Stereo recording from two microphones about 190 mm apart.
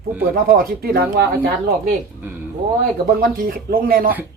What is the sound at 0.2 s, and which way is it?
Speech, 50° right (ahead or behind).